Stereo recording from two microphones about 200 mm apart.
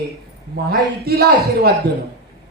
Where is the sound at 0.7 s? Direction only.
50° right (ahead or behind).